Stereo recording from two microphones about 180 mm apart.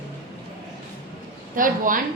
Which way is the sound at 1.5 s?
50° right (ahead or behind).